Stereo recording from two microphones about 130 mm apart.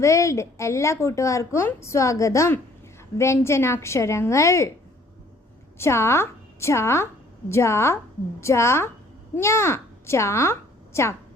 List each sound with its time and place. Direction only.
0.0 s a woman's voice: 25° left (ahead or behind)
5.7 s a woman's voice: 20° left (ahead or behind)